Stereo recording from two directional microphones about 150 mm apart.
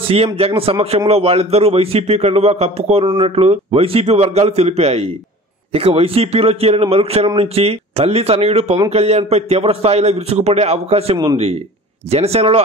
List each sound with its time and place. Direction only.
0.1 s a man's voice: 40° right (ahead or behind)
3.1 s speech: 30° right (ahead or behind)
3.3 s a man's voice: 40° right (ahead or behind)